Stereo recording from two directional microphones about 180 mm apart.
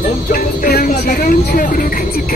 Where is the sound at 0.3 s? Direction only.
50° left (ahead or behind).